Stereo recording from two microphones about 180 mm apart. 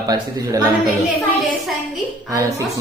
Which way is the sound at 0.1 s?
20° right (ahead or behind).